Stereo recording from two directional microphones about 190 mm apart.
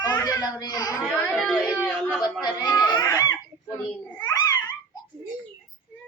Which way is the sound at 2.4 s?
20° left (ahead or behind).